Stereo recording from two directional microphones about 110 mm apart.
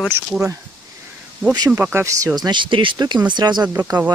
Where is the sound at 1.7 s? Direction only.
10° right (ahead or behind).